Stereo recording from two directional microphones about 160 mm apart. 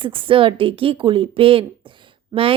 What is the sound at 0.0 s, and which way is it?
A woman's voice, 30° right (ahead or behind).